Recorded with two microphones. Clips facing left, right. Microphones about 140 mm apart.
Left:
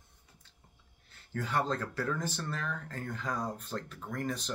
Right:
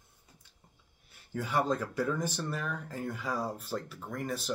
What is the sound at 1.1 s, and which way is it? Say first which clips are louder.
Speech: right 1 dB; 10° right (ahead or behind).